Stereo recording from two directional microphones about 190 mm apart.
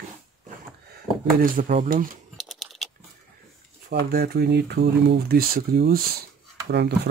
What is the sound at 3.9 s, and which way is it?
Speech, 55° right (ahead or behind).